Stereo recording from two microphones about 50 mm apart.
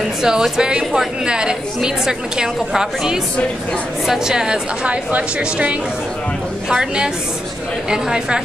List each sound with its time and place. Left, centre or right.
0.0 s a woman's voice: centre
4.8 s speech: right
6.7 s a woman's voice: centre